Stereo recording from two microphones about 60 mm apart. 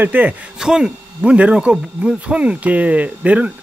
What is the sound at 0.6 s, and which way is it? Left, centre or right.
Speech, centre.